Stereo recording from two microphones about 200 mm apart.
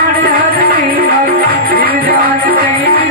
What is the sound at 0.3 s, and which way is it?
Music, 45° right (ahead or behind).